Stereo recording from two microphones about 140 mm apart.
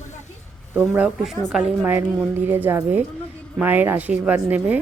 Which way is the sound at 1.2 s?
5° right (ahead or behind).